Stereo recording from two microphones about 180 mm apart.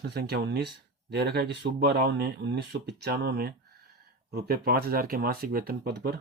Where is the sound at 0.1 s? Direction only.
65° right (ahead or behind).